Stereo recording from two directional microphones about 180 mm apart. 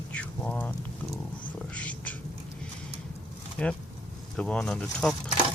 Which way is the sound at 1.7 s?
10° left (ahead or behind).